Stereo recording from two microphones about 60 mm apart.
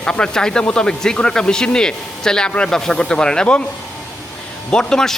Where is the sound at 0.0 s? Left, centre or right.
Centre.